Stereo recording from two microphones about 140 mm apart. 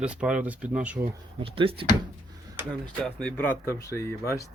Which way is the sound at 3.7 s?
20° left (ahead or behind).